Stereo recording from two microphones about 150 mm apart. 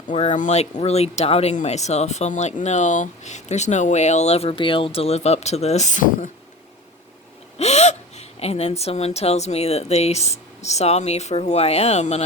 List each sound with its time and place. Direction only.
0.1 s speech: 55° left (ahead or behind)
7.6 s speech: 45° left (ahead or behind)